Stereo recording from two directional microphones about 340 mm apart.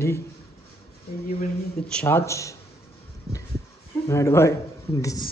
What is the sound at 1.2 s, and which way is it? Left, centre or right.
Speech, left.